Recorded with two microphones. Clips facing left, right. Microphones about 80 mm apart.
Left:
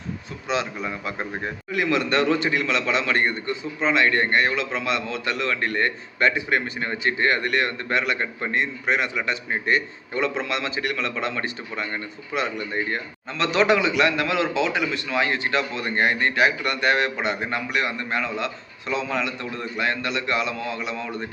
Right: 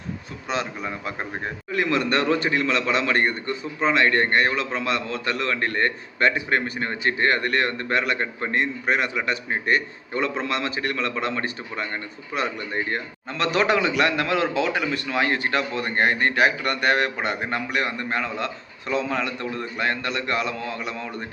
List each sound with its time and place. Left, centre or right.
0.4 s a man's voice: right
1.7 s a man's voice: right
3.9 s a man's voice: right
12.4 s a man's voice: right